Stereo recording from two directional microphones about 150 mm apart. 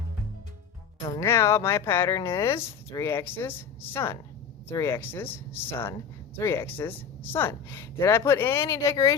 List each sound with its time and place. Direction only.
1.0 s speech: 20° left (ahead or behind)